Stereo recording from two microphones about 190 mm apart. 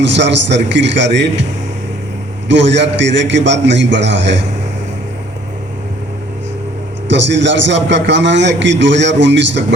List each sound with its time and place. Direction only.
0.0 s a man's voice: 70° right (ahead or behind)
2.5 s a man's voice: 70° right (ahead or behind)
7.1 s a man's voice: 70° right (ahead or behind)